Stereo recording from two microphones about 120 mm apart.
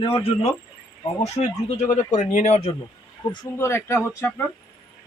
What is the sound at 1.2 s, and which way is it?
Speech, 75° left (ahead or behind).